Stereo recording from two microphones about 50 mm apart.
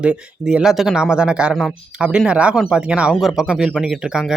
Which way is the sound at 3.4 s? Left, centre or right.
Centre.